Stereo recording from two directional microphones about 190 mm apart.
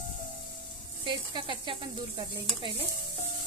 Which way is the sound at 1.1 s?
25° right (ahead or behind).